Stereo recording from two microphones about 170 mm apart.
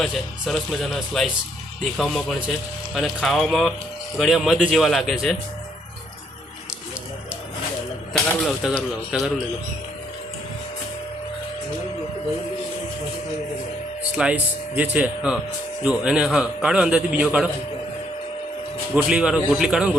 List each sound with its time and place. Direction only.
0.0 s a man's voice: centre (ahead or behind)
8.6 s a man's voice: 5° right (ahead or behind)
14.2 s a man's voice: 5° right (ahead or behind)
18.9 s a man's voice: 5° right (ahead or behind)